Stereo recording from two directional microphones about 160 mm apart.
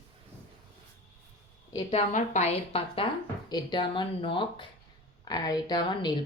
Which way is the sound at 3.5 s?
25° left (ahead or behind).